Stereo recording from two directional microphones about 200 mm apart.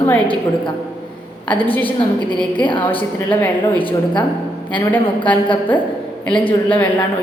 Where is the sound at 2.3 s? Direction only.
25° left (ahead or behind).